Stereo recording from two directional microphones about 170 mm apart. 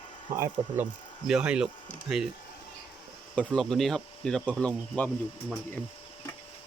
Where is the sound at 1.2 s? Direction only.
5° right (ahead or behind).